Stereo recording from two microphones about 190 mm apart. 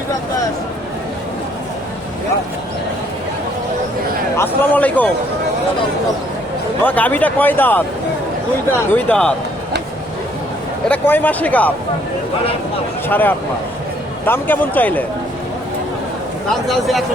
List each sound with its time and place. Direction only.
4.4 s speech: 10° left (ahead or behind)
6.8 s speech: 10° left (ahead or behind)
8.9 s speech: 10° left (ahead or behind)
10.8 s speech: 10° left (ahead or behind)
13.1 s speech: 10° left (ahead or behind)
16.5 s speech: centre (ahead or behind)